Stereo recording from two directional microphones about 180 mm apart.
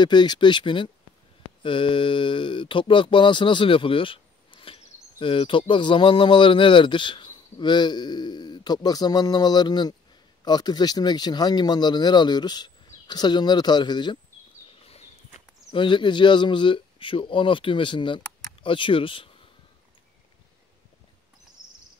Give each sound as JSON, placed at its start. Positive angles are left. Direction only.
{"t": 0.0, "sound": "speech", "side_deg": 25}
{"t": 14.7, "sound": "a sound", "side_deg": 35}
{"t": 15.7, "sound": "speech", "side_deg": 25}